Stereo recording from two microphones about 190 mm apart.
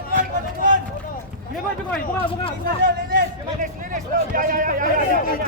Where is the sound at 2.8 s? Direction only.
45° right (ahead or behind).